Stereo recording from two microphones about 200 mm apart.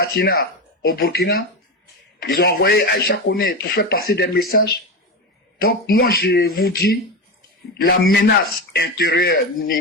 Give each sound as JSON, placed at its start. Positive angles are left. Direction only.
{"t": 0.0, "sound": "speech", "side_deg": 50}
{"t": 5.6, "sound": "speech", "side_deg": 50}